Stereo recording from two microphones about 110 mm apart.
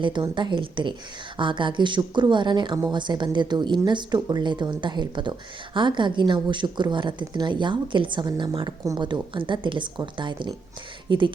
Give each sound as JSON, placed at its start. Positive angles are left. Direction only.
{"t": 0.0, "sound": "speech", "side_deg": -45}